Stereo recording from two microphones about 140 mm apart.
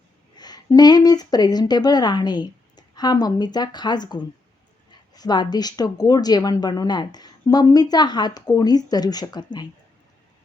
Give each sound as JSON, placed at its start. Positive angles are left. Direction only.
{"t": 0.3, "sound": "speech", "side_deg": 30}